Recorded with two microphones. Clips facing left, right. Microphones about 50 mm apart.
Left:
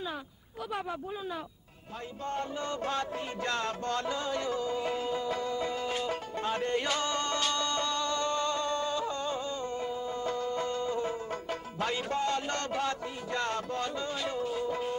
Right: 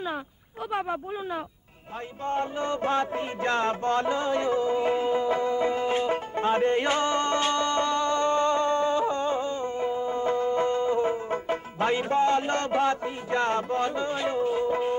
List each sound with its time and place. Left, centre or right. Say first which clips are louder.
0.7 s speech: right 7 dB; right
2.2 s music: right 7 dB; right